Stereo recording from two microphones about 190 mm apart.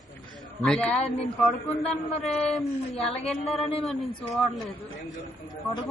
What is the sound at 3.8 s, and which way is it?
Speech, centre (ahead or behind).